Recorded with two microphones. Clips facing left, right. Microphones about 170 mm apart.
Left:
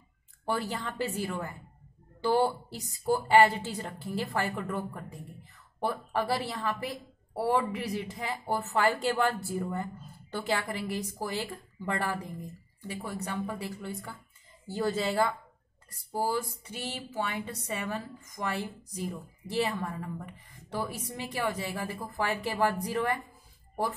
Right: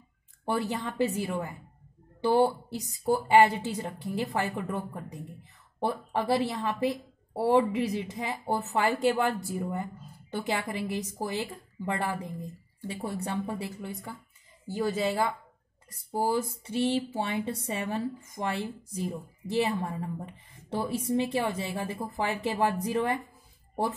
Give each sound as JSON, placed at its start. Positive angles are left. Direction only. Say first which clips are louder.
{"t": 0.5, "sound": "speech", "louder": "right 2 dB", "side_deg": -20}